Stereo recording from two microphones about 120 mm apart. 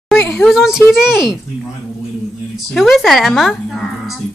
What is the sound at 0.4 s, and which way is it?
A woman's voice, 5° left (ahead or behind).